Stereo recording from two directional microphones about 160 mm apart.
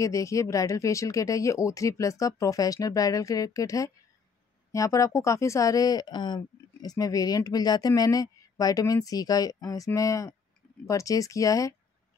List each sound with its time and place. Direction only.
0.0 s speech: 20° left (ahead or behind)